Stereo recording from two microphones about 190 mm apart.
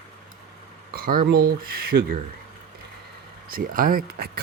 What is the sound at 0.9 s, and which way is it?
Speech, 50° right (ahead or behind).